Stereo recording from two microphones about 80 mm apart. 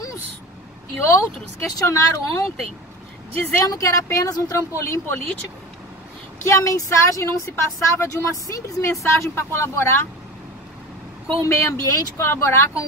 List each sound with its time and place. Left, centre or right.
0.9 s speech: left
3.6 s speech: left
6.4 s speech: left
11.4 s speech: left